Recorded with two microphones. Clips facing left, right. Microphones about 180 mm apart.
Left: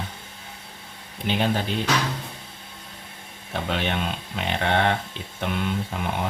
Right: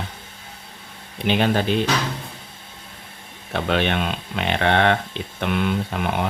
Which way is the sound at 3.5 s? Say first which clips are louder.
Right 5 dB; 70° right (ahead or behind).